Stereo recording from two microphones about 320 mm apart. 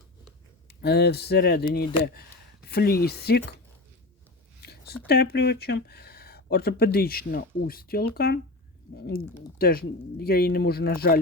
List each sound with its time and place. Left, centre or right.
0.7 s speech: left
2.6 s speech: left
4.6 s speech: left